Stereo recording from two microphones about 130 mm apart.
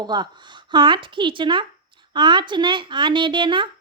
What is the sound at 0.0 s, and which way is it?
A woman's voice, 35° right (ahead or behind).